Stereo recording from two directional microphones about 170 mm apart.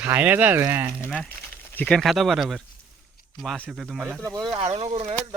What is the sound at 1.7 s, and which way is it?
Speech, 5° left (ahead or behind).